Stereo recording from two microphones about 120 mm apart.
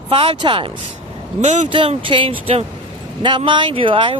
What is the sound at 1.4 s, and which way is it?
Speech, 75° right (ahead or behind).